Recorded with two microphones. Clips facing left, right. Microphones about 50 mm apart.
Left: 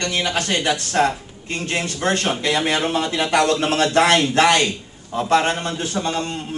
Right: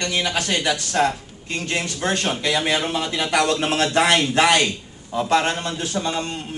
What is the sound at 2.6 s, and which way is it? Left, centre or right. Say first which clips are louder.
Speech: left 2 dB; centre.